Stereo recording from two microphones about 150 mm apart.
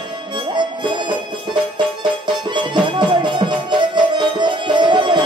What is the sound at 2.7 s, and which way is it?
Music, 30° right (ahead or behind).